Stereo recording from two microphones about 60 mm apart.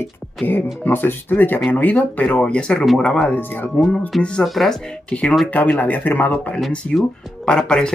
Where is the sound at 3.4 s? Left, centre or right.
Left.